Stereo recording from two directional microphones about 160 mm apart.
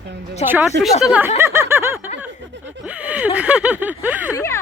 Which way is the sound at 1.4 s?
15° right (ahead or behind).